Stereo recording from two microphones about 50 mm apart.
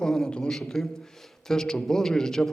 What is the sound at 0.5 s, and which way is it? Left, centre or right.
A man's voice, centre.